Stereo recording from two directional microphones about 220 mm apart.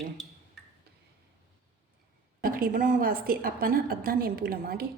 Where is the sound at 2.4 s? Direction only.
40° right (ahead or behind).